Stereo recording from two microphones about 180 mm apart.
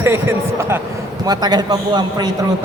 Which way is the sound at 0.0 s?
15° right (ahead or behind).